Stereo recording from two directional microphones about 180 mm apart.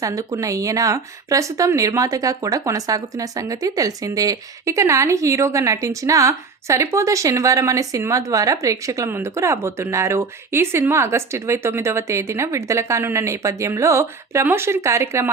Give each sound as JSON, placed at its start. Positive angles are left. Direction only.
{"t": 0.0, "sound": "speech", "side_deg": -20}